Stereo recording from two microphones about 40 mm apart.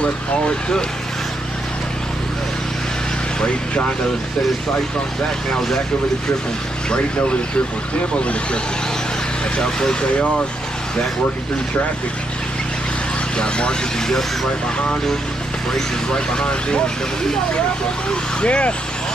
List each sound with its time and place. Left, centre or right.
0.0 s speech: left
3.3 s speech: left
9.6 s speech: centre
13.4 s speech: left
16.3 s speech: left
18.4 s speech: left